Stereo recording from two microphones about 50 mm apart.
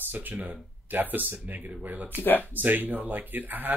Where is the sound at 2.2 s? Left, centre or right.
Left.